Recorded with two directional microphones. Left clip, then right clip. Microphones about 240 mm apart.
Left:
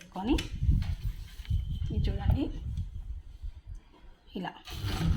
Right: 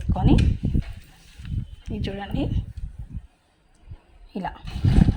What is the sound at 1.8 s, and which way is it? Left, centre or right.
Speech, right.